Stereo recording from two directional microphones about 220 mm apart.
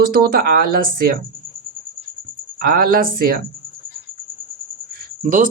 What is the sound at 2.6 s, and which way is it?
Speech, 40° right (ahead or behind).